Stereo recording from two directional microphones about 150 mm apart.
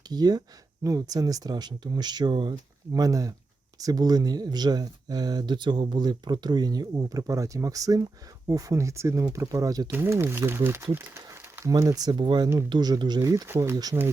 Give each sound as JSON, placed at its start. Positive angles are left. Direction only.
{"t": 0.1, "sound": "speech", "side_deg": -25}